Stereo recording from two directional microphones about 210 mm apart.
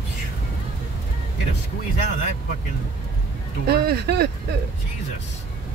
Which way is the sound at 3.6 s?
50° right (ahead or behind).